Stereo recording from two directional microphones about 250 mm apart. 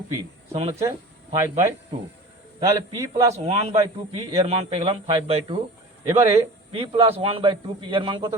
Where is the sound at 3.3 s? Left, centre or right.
Right.